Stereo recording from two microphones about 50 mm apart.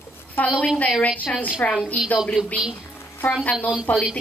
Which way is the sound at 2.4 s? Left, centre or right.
Centre.